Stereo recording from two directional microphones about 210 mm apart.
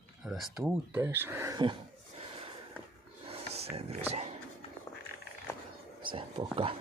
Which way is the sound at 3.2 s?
30° right (ahead or behind).